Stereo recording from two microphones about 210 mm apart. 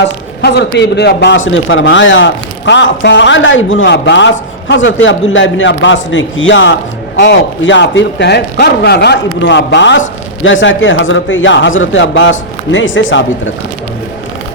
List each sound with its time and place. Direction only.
0.4 s a man's voice: 55° left (ahead or behind)